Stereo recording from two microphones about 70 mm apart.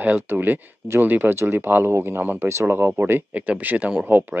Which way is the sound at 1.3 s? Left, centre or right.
Right.